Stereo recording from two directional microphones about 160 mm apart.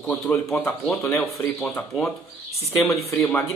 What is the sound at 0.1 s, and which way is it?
Speech, 5° left (ahead or behind).